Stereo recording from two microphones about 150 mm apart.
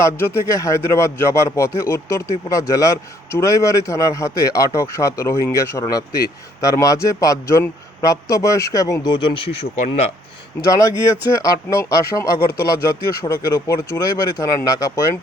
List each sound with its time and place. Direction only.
0.0 s a man's voice: 15° left (ahead or behind); by 9.6 s 40° left (ahead or behind)
9.8 s speech: 50° left (ahead or behind)
10.7 s a man's voice: 20° left (ahead or behind)